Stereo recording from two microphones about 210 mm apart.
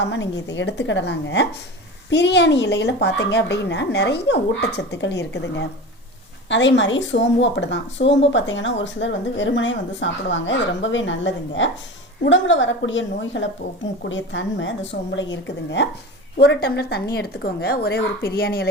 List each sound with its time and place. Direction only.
0.0 s a woman's voice: 60° left (ahead or behind)